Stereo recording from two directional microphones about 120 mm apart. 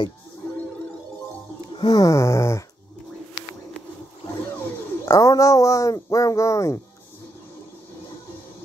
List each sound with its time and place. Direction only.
1.8 s speech: 35° left (ahead or behind)
5.0 s speech: 30° left (ahead or behind)